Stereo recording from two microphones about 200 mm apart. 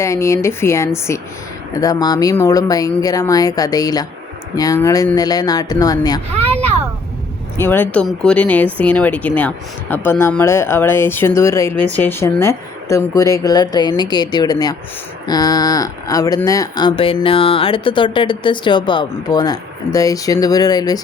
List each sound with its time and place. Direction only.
0.0 s speech: 15° left (ahead or behind)
7.5 s speech: 10° left (ahead or behind)